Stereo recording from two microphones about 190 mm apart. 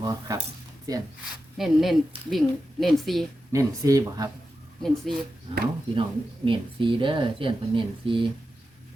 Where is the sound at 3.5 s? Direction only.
15° right (ahead or behind).